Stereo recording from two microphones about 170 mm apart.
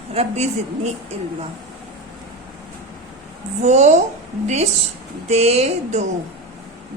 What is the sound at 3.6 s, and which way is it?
Speech, 40° right (ahead or behind).